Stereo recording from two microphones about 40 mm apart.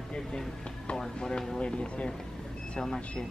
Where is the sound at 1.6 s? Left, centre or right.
Left.